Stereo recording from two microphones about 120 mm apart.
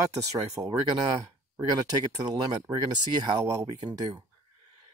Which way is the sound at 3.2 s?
30° right (ahead or behind).